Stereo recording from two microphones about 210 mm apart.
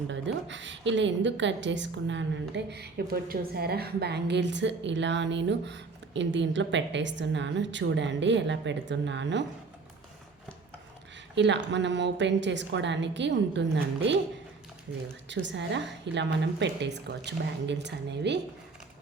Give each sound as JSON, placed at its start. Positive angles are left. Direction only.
{"t": 0.1, "sound": "a woman's voice", "side_deg": -60}
{"t": 11.3, "sound": "a woman's voice", "side_deg": -60}
{"t": 15.3, "sound": "a woman's voice", "side_deg": -60}